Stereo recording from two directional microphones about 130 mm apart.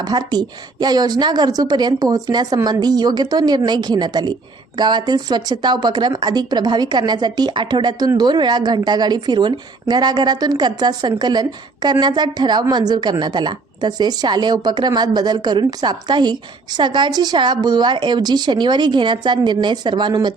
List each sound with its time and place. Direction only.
0.0 s a woman's voice: 35° right (ahead or behind)